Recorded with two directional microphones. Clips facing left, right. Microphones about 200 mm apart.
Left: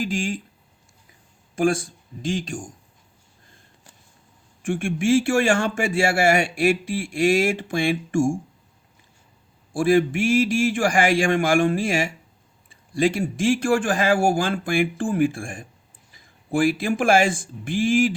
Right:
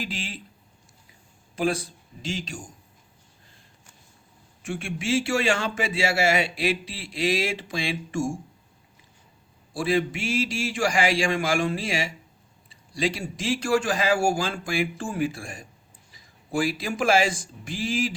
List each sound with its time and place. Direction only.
0.0 s a man's voice: 45° left (ahead or behind)
1.5 s a man's voice: 50° left (ahead or behind)
4.6 s a man's voice: 50° left (ahead or behind)
9.7 s a man's voice: 50° left (ahead or behind)